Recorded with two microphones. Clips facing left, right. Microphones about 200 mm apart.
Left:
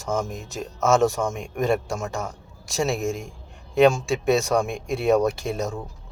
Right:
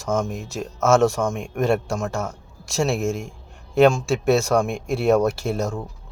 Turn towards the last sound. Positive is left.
turn(degrees=0)  # may be behind; listen again after turning